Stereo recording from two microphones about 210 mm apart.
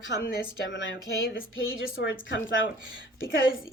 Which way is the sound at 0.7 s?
65° left (ahead or behind).